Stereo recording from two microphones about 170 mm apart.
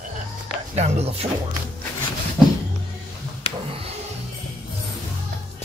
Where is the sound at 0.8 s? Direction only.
40° right (ahead or behind).